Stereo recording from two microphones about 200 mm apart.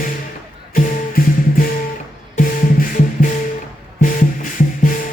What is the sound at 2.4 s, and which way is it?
Music, 40° left (ahead or behind).